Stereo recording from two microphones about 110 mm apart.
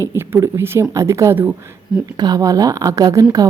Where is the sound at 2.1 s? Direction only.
35° right (ahead or behind).